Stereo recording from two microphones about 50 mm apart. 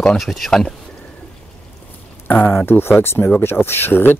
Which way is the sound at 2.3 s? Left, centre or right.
Left.